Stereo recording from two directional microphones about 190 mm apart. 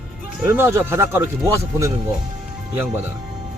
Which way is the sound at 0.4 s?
10° right (ahead or behind).